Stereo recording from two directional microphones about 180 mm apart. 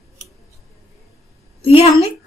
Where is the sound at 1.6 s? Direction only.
30° left (ahead or behind).